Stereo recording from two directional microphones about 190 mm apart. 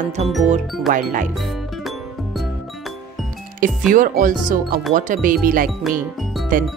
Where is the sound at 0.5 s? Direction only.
45° right (ahead or behind).